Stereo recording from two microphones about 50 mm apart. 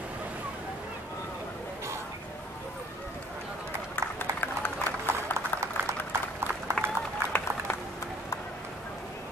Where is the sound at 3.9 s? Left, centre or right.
Left.